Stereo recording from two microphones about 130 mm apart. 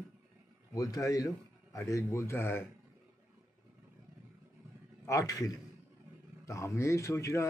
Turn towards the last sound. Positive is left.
turn(degrees=25)  # may be behind; listen again after turning